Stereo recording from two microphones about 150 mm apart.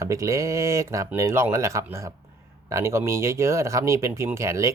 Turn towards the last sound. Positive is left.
turn(degrees=-20)  # may be behind; listen again after turning